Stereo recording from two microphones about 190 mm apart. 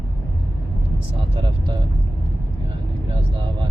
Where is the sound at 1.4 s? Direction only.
25° right (ahead or behind).